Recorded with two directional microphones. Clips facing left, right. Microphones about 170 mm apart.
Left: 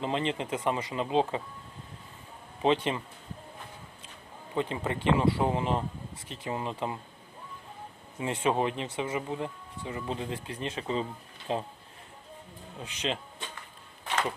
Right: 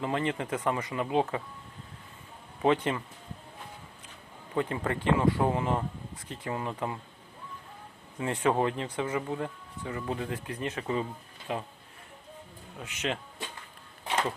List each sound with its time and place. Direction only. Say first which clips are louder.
0.0 s speech: even; 20° left (ahead or behind)
2.6 s speech: even; 25° left (ahead or behind)
4.5 s speech: right 1 dB; 20° left (ahead or behind)
8.2 s speech: right 1 dB; 20° left (ahead or behind)
12.8 s speech: even; 30° left (ahead or behind)